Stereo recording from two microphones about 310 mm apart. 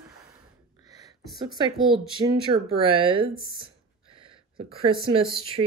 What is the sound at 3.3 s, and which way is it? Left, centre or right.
Speech, left.